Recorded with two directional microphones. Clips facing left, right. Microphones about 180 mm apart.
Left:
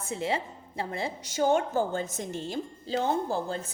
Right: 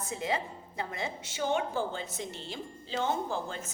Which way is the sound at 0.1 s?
30° left (ahead or behind).